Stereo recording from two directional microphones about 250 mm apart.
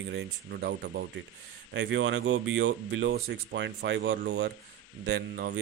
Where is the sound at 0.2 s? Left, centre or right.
Right.